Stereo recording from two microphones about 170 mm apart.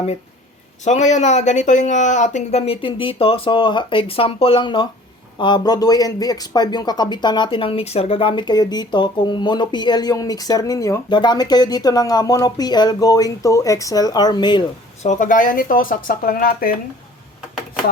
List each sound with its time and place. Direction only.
0.9 s speech: 45° left (ahead or behind); by 14.6 s 25° left (ahead or behind)
15.0 s speech: 45° left (ahead or behind)